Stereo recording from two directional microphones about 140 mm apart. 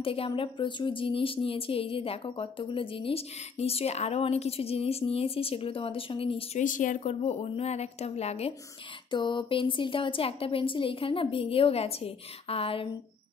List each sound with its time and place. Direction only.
0.0 s speech: 40° left (ahead or behind)
6.6 s a woman's voice: 65° left (ahead or behind); by 8.5 s 45° left (ahead or behind)
9.1 s speech: 35° left (ahead or behind)